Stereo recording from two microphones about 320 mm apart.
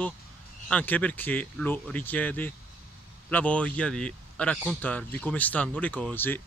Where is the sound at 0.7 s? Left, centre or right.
Centre.